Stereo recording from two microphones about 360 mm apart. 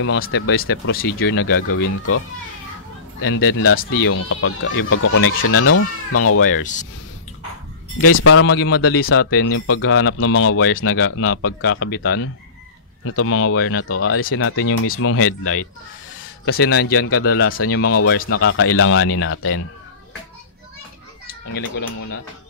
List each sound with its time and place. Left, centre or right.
0.0 s speech: left
1.7 s speech: left
6.6 s speech: left
8.0 s speech: left
17.8 s speech: left